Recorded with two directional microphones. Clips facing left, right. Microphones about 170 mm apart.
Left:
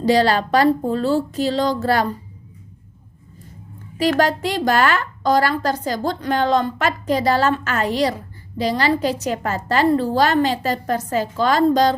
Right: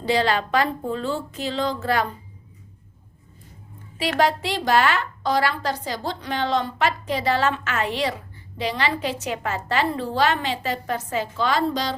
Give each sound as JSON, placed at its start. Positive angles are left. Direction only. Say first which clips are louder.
{"t": 0.0, "sound": "a woman's voice", "louder": "left 5 dB", "side_deg": 40}
{"t": 4.2, "sound": "a woman's voice", "louder": "left 3 dB", "side_deg": 45}